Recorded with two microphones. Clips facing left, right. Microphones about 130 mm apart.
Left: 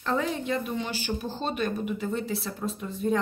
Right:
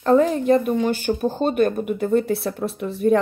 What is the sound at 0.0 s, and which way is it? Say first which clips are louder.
Speech: right 11 dB; 45° right (ahead or behind).